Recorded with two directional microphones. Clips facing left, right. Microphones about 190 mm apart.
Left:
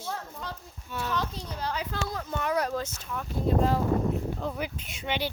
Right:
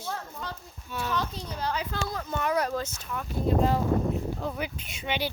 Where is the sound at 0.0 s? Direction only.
5° left (ahead or behind).